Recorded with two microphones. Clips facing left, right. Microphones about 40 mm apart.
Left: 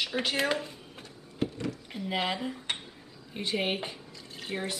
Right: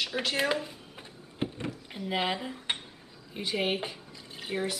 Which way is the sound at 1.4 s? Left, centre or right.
Centre.